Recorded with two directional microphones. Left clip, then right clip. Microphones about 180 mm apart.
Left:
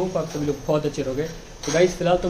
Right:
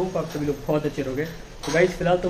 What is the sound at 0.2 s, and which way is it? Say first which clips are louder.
A man's voice: left 1 dB; 5° left (ahead or behind).